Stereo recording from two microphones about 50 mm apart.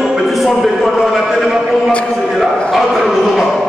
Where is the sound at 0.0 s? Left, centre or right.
Centre.